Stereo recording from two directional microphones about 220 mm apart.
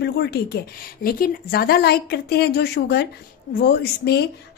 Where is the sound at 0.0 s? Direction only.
45° left (ahead or behind).